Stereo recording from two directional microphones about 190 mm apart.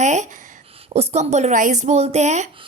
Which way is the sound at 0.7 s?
30° right (ahead or behind).